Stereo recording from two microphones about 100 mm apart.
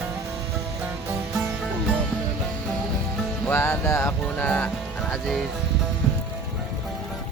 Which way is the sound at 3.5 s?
25° left (ahead or behind).